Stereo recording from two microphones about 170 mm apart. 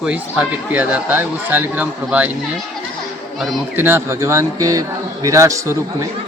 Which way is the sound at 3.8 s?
15° right (ahead or behind).